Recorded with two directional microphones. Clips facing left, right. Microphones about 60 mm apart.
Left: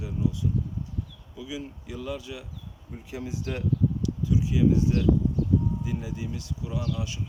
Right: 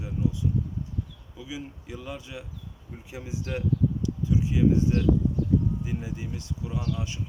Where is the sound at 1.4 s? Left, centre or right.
Right.